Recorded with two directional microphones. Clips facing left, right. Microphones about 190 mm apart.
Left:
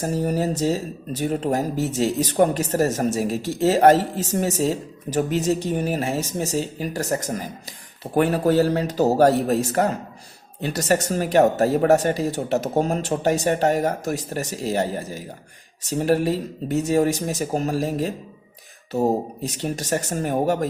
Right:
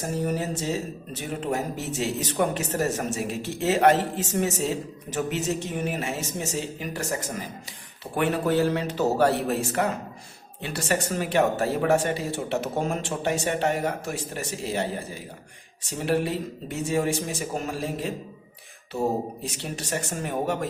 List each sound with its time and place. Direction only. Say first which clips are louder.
0.0 s speech: left 5 dB; 35° left (ahead or behind)